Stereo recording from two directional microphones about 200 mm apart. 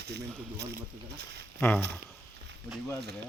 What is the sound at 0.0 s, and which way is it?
Speech, 55° right (ahead or behind).